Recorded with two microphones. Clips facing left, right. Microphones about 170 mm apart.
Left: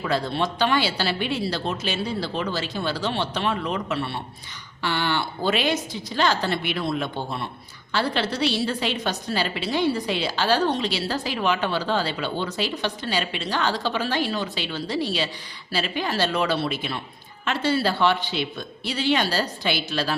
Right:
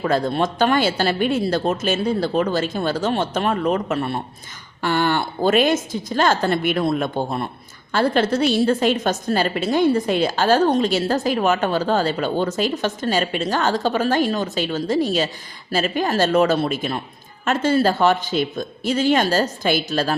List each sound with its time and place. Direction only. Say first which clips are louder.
0.0 s a woman's voice: right 5 dB; 50° right (ahead or behind)